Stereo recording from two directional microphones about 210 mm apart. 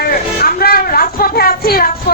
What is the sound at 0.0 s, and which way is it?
Speech, 45° left (ahead or behind).